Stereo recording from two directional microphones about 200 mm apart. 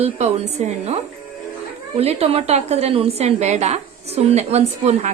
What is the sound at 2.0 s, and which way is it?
A woman's voice, 30° right (ahead or behind).